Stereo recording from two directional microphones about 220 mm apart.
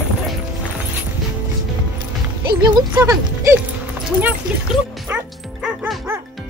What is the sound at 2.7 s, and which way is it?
Speech, 15° right (ahead or behind).